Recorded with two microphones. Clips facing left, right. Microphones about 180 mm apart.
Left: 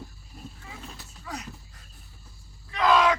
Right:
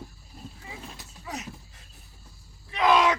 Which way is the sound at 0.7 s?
20° right (ahead or behind).